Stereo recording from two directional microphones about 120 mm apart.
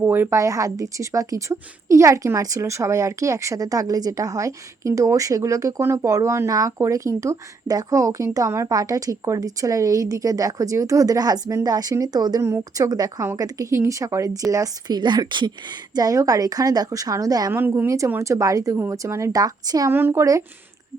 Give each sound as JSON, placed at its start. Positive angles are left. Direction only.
{"t": 0.0, "sound": "a woman's voice", "side_deg": -20}
{"t": 17.5, "sound": "a woman's voice", "side_deg": -20}
{"t": 19.9, "sound": "a woman's voice", "side_deg": -20}